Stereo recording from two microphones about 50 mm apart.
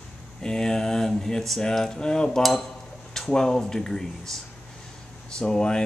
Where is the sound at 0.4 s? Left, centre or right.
Centre.